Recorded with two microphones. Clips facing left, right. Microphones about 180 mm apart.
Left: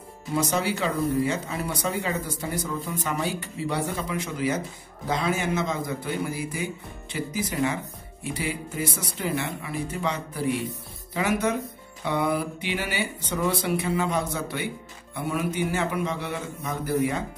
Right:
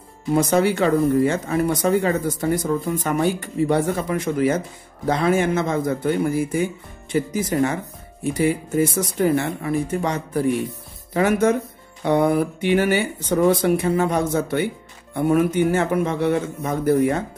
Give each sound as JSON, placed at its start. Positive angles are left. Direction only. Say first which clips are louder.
{"t": 0.3, "sound": "a man's voice", "louder": "right 8 dB", "side_deg": -55}